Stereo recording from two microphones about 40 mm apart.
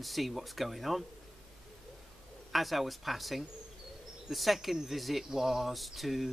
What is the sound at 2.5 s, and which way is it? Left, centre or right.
Speech, centre.